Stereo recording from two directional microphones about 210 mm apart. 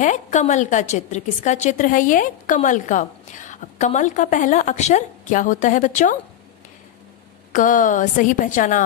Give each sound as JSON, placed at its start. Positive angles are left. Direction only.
{"t": 0.0, "sound": "a woman's voice", "side_deg": 35}
{"t": 7.5, "sound": "a woman's voice", "side_deg": 40}